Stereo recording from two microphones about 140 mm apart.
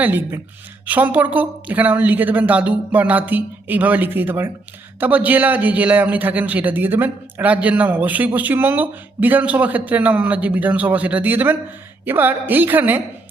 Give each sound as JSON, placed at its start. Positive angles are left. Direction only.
{"t": 0.0, "sound": "a man's voice", "side_deg": -15}